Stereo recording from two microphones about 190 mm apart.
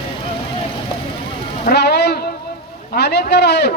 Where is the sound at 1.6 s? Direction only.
60° left (ahead or behind).